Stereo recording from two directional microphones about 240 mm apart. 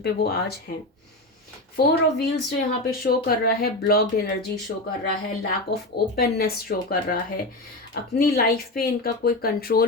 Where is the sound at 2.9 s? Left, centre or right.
Left.